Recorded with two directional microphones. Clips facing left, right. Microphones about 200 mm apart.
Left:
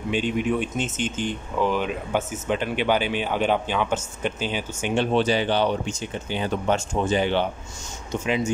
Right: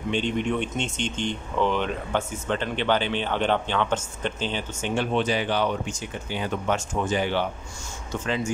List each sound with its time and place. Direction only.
0.1 s speech: 5° left (ahead or behind)
4.9 s speech: 30° left (ahead or behind)